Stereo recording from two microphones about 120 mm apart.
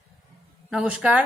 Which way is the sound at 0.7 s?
10° right (ahead or behind).